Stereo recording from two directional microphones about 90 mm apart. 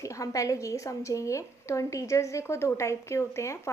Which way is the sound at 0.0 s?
35° left (ahead or behind).